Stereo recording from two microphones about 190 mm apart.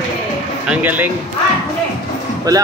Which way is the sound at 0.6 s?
10° right (ahead or behind).